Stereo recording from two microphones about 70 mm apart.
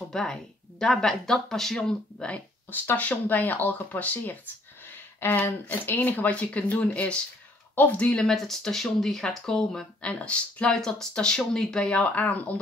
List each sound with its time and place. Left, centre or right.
0.1 s speech: centre